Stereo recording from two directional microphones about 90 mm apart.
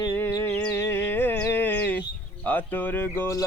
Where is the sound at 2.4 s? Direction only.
20° left (ahead or behind).